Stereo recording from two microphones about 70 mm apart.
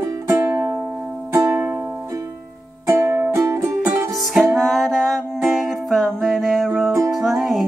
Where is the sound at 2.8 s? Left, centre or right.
Right.